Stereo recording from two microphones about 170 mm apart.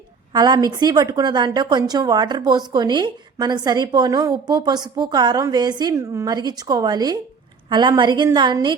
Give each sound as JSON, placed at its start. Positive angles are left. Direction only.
{"t": 0.3, "sound": "a woman's voice", "side_deg": -25}